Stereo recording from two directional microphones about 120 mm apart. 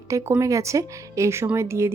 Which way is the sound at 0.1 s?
25° right (ahead or behind).